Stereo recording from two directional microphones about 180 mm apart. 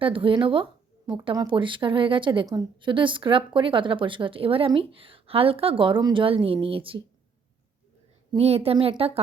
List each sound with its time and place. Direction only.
0.0 s speech: 30° right (ahead or behind)
8.3 s a woman's voice: 35° right (ahead or behind)